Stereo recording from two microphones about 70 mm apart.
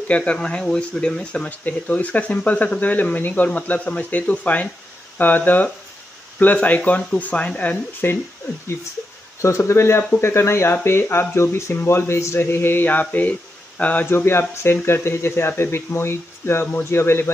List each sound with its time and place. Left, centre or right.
0.1 s speech: centre
9.4 s speech: left
14.1 s speech: left